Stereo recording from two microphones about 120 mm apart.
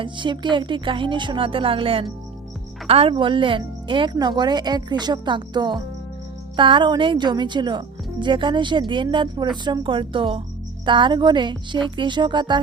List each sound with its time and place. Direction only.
0.0 s a woman's voice: 40° right (ahead or behind)